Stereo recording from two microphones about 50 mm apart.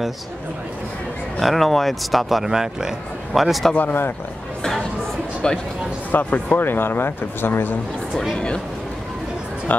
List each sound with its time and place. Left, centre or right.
1.4 s speech: centre
3.7 s speech: left
5.4 s speech: centre
6.1 s speech: left
9.7 s music: left